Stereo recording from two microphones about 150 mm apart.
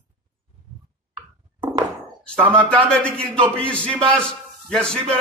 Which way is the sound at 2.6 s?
10° left (ahead or behind).